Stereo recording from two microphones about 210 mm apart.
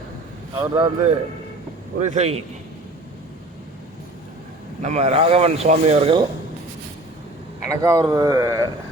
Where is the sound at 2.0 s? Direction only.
35° right (ahead or behind).